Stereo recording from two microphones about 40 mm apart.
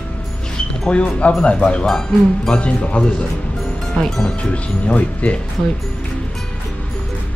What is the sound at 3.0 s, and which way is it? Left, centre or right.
Speech, left.